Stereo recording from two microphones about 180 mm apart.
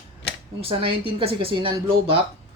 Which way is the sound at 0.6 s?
30° right (ahead or behind).